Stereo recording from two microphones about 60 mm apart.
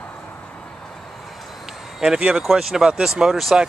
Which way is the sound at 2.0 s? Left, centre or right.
Centre.